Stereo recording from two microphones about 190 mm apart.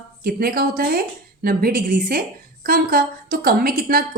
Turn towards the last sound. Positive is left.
turn(degrees=-50)  # may be behind; listen again after turning